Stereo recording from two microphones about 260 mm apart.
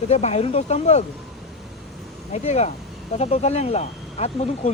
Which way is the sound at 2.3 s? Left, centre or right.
Left.